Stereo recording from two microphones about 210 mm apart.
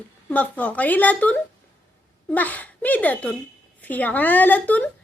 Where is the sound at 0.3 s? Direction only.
5° left (ahead or behind).